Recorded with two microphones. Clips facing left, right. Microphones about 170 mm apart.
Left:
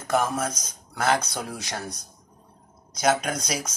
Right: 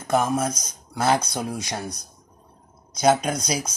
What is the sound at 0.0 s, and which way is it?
Speech, 20° right (ahead or behind).